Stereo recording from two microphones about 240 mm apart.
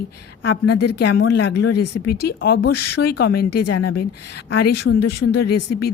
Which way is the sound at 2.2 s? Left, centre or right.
Left.